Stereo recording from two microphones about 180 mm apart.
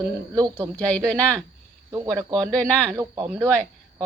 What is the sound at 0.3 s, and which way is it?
Speech, 20° right (ahead or behind).